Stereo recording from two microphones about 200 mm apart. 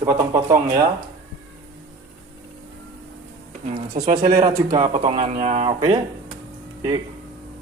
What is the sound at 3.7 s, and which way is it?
Speech, 35° right (ahead or behind).